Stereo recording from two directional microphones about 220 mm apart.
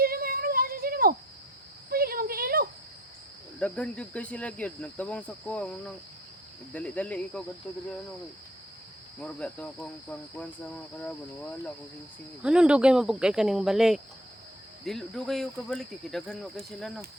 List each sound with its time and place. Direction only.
0.0 s a sound: 45° right (ahead or behind)
3.6 s cricket: 5° left (ahead or behind)
9.2 s cricket: 5° left (ahead or behind)
12.4 s cricket: 5° right (ahead or behind)